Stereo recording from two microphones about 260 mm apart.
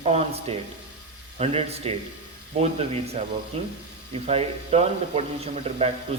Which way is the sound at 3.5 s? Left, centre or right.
Right.